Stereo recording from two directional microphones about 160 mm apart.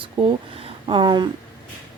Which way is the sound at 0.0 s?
35° right (ahead or behind).